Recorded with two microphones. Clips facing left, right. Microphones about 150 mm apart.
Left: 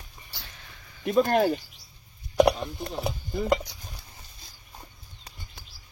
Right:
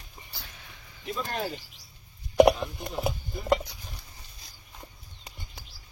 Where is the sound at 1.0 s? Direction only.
60° left (ahead or behind).